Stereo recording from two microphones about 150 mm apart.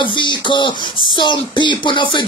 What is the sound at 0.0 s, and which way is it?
Speech, 30° left (ahead or behind).